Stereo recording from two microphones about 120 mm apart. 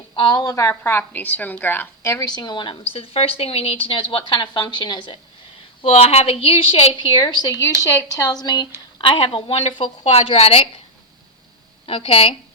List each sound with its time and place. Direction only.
0.2 s a woman's voice: 35° left (ahead or behind)
2.9 s a woman's voice: 50° left (ahead or behind)
5.8 s a woman's voice: 55° left (ahead or behind)
7.1 s a woman's voice: 35° left (ahead or behind); by 10.7 s 55° left (ahead or behind)
11.9 s a woman's voice: 50° left (ahead or behind)